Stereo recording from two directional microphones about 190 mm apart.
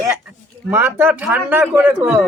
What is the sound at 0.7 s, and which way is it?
A man's voice, 10° right (ahead or behind).